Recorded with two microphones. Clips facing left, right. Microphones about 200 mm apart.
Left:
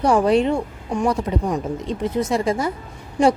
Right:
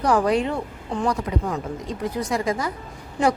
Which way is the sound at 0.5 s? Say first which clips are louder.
Left 4 dB; 15° left (ahead or behind).